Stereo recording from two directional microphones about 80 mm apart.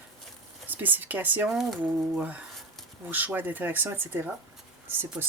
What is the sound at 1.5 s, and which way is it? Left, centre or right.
Speech, centre.